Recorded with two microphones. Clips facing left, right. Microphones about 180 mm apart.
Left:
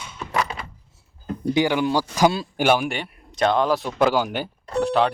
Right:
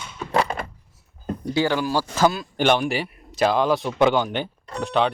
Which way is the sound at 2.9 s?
5° right (ahead or behind).